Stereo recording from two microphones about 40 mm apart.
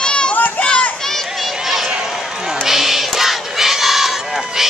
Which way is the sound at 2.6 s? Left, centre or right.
Centre.